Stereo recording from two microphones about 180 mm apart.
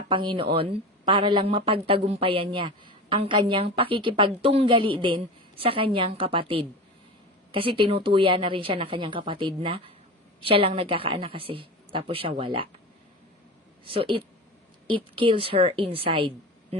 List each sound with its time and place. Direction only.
0.1 s a woman's voice: 25° right (ahead or behind)
13.8 s a woman's voice: 30° right (ahead or behind)